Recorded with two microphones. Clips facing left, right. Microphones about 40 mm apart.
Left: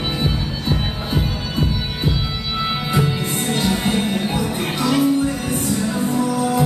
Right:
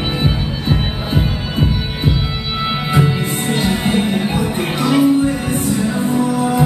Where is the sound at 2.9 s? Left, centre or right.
Centre.